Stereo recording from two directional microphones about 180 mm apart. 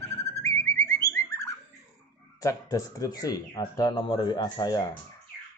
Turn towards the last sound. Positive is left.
turn(degrees=25)  # may be behind; listen again after turning